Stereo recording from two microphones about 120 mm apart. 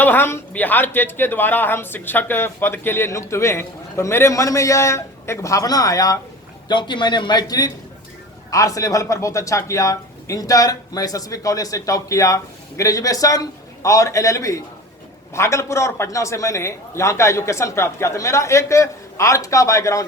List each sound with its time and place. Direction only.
0.0 s speech: 15° left (ahead or behind)